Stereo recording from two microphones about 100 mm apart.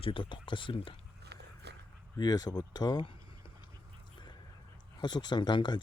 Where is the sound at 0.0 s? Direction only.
60° left (ahead or behind).